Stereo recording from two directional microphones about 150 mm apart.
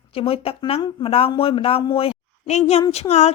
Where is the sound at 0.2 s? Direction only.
40° left (ahead or behind).